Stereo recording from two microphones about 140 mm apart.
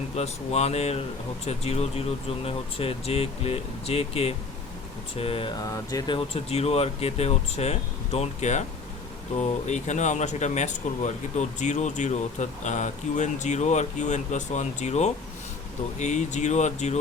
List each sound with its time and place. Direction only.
0.2 s speech: 50° left (ahead or behind)